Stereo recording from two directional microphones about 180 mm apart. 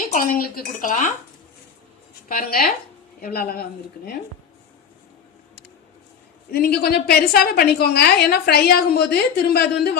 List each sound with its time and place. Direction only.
0.1 s speech: 55° left (ahead or behind)
2.3 s a woman's voice: 50° left (ahead or behind)
6.5 s a woman's voice: 60° left (ahead or behind)